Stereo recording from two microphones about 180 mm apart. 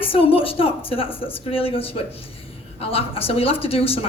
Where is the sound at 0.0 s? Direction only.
30° left (ahead or behind).